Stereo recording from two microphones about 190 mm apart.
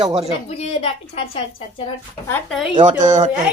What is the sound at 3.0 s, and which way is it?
Speech, 40° right (ahead or behind).